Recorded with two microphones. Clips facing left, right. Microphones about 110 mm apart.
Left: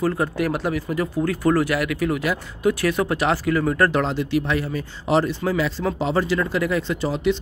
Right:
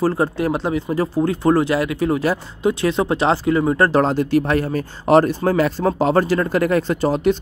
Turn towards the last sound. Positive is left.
turn(degrees=-45)  # may be behind; listen again after turning